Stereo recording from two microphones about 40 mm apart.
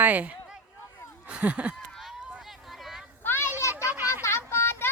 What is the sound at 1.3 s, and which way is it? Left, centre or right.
Speech, right.